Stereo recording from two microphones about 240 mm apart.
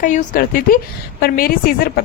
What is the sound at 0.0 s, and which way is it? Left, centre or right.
A woman's voice, left.